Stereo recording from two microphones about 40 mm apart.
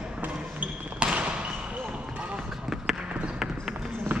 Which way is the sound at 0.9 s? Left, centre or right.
Right.